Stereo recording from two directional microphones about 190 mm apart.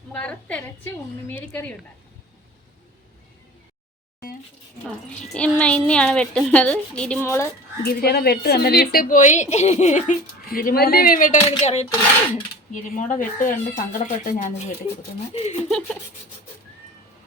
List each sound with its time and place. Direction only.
0.1 s a woman's voice: 5° left (ahead or behind)
4.9 s a woman's voice: 5° left (ahead or behind)
7.8 s a woman's voice: 55° left (ahead or behind); by 15.5 s 35° left (ahead or behind)